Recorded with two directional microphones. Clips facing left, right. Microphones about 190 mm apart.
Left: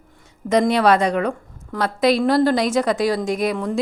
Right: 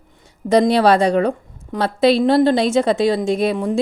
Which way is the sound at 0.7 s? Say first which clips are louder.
Right 3 dB; 30° right (ahead or behind).